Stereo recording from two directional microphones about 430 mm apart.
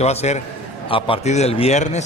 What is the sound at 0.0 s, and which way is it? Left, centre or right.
A man's voice, centre.